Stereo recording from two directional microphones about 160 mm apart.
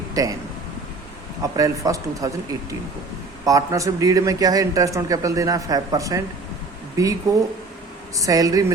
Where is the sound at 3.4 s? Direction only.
20° right (ahead or behind).